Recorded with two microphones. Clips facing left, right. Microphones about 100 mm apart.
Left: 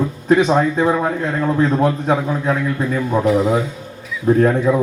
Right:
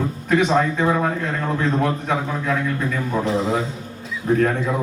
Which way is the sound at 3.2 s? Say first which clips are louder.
Left 8 dB; 30° right (ahead or behind).